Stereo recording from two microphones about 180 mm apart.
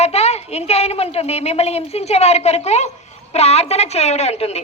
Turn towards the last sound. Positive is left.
turn(degrees=35)  # may be behind; listen again after turning